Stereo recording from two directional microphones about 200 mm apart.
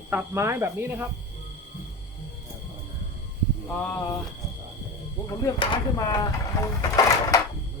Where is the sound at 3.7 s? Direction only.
10° left (ahead or behind).